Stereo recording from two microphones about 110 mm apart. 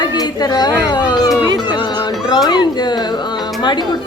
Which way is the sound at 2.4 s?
40° left (ahead or behind).